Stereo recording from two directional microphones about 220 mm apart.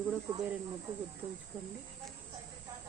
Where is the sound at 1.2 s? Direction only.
25° right (ahead or behind).